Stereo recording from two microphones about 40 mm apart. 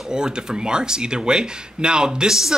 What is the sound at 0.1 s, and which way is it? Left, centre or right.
Speech, centre.